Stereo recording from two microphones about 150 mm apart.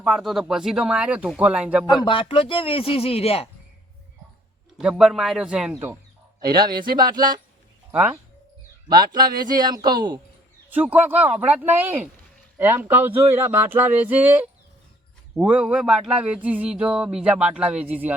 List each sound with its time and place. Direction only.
0.0 s speech: centre (ahead or behind)
2.0 s speech: 35° left (ahead or behind)
4.8 s speech: 5° right (ahead or behind)
6.5 s speech: 30° right (ahead or behind)
8.9 s speech: 30° right (ahead or behind)
10.7 s speech: 10° right (ahead or behind)